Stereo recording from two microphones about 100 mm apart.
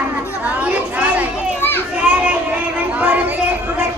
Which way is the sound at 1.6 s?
20° left (ahead or behind).